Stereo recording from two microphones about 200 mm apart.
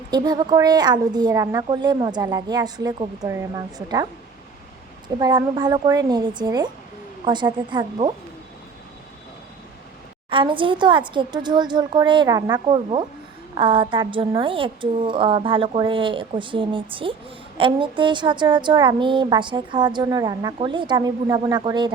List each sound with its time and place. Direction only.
0.1 s a woman's voice: 20° right (ahead or behind)
10.2 s a woman's voice: 25° right (ahead or behind)